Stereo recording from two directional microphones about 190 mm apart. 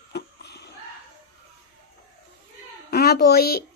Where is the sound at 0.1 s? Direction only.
60° left (ahead or behind).